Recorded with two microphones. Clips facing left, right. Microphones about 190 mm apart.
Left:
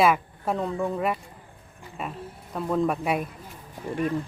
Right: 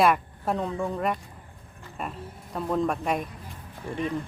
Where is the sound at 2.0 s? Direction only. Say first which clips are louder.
Left 1 dB; centre (ahead or behind).